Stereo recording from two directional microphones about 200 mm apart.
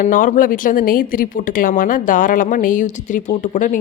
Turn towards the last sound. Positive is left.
turn(degrees=40)  # may be behind; listen again after turning